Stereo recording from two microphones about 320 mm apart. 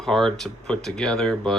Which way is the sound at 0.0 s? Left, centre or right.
Centre.